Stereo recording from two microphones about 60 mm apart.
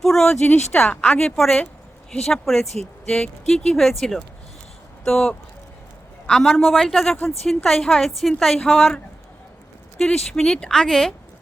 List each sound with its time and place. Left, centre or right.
0.0 s speech: centre
0.4 s a woman's voice: centre
10.0 s speech: centre